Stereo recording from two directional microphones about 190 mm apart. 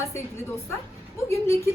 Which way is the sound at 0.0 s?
15° left (ahead or behind).